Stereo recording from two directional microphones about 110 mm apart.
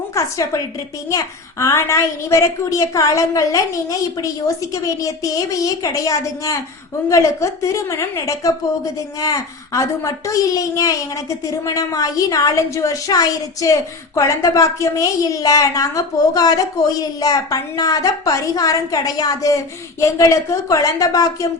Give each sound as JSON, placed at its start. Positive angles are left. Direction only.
{"t": 0.1, "sound": "a woman's voice", "side_deg": 30}